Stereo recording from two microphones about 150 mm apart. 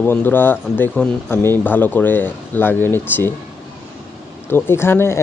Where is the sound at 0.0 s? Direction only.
15° left (ahead or behind).